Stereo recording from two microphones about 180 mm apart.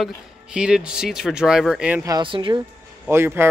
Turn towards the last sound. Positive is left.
turn(degrees=-15)  # may be behind; listen again after turning